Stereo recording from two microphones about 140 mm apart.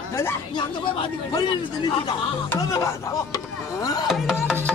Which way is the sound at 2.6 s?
25° left (ahead or behind).